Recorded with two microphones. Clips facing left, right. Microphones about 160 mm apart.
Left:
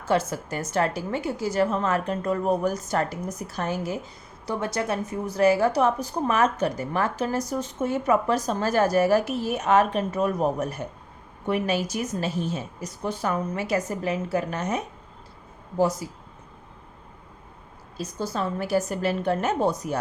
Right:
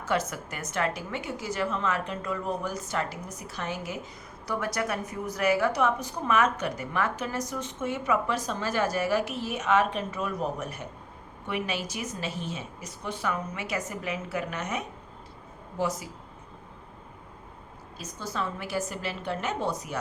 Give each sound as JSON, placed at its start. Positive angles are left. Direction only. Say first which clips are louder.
{"t": 0.0, "sound": "a woman's voice", "louder": "left 5 dB", "side_deg": 30}
{"t": 4.4, "sound": "a woman's voice", "louder": "left 3 dB", "side_deg": 25}
{"t": 17.9, "sound": "a woman's voice", "louder": "left 5 dB", "side_deg": 35}